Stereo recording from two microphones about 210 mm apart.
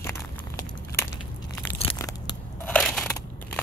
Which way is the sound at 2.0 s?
15° left (ahead or behind).